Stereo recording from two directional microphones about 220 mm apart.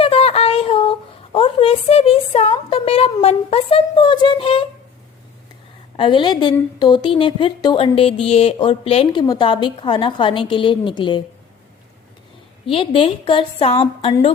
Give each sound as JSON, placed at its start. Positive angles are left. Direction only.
{"t": 0.0, "sound": "a sound", "side_deg": 25}
{"t": 6.0, "sound": "a woman's voice", "side_deg": 20}
{"t": 12.6, "sound": "a woman's voice", "side_deg": 25}